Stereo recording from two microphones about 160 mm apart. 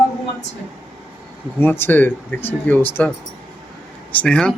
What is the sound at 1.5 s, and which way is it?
Speech, 15° left (ahead or behind).